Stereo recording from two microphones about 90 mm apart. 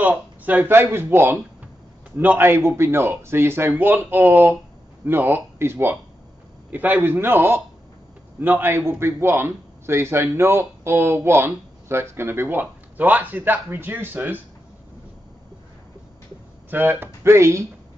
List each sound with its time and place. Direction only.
0.0 s a man's voice: 15° right (ahead or behind)
16.7 s a man's voice: 20° right (ahead or behind)